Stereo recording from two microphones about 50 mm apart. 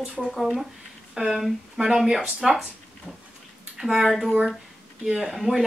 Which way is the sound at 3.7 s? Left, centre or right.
Centre.